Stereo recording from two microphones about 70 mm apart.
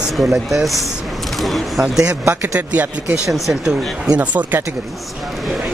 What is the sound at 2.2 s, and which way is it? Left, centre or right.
Speech, right.